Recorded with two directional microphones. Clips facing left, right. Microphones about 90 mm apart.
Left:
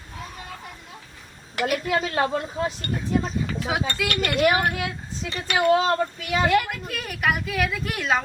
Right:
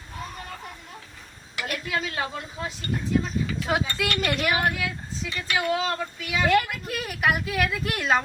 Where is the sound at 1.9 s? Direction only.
40° left (ahead or behind).